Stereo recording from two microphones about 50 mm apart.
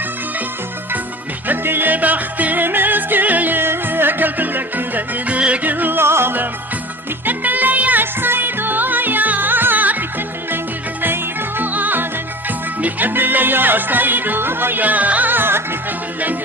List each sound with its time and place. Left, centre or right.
1.5 s music: right
5.7 s music: right
6.0 s music: right
7.3 s music: right
11.0 s music: right